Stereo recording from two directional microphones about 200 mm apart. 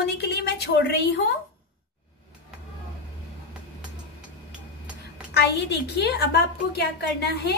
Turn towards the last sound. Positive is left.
turn(degrees=55)  # may be behind; listen again after turning